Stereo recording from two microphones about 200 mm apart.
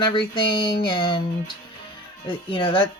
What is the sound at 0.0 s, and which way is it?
Speech, 25° left (ahead or behind).